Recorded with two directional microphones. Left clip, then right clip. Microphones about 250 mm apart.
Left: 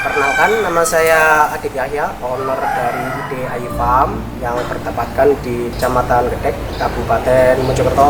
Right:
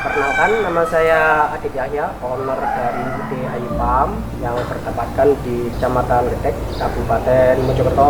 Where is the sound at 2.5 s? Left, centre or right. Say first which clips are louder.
Left 3 dB; centre.